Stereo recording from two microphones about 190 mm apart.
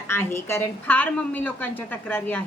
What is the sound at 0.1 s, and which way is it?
A woman's voice, 10° left (ahead or behind).